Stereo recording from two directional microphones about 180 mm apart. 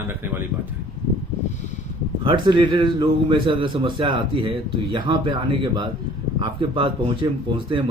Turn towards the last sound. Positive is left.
turn(degrees=-30)  # may be behind; listen again after turning